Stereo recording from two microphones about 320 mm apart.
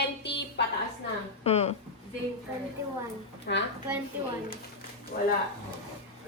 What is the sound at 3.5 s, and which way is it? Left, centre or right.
Speech, left.